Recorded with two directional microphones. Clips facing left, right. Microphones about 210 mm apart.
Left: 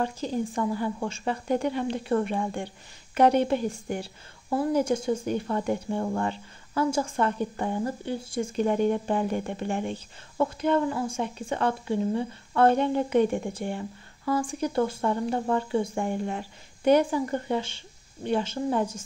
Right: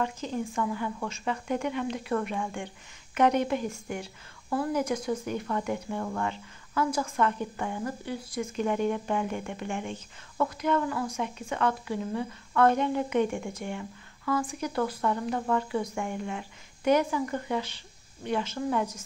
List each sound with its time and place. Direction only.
0.0 s a woman's voice: 35° left (ahead or behind)